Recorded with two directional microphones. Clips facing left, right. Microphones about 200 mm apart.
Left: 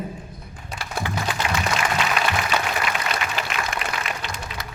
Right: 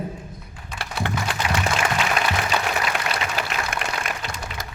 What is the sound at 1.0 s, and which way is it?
Music, 60° right (ahead or behind).